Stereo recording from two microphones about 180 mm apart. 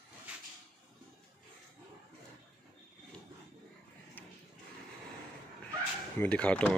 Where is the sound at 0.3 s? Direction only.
5° right (ahead or behind).